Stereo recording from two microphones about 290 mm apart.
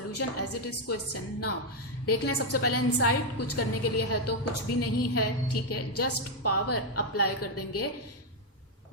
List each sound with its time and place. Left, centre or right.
0.1 s a woman's voice: left